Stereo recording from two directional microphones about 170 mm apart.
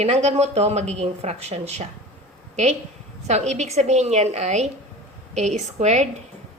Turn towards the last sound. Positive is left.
turn(degrees=-40)  # may be behind; listen again after turning